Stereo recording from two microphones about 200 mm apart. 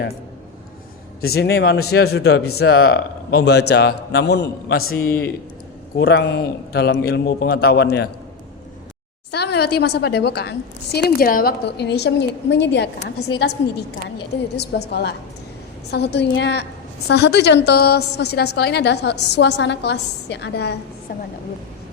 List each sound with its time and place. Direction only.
1.2 s speech: 55° left (ahead or behind)
4.9 s a man's voice: 15° left (ahead or behind)
6.0 s a man's voice: 55° left (ahead or behind)
9.3 s speech: 55° left (ahead or behind)
14.5 s speech: 55° left (ahead or behind)